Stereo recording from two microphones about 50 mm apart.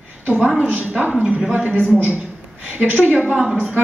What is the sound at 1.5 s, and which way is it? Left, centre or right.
Speech, right.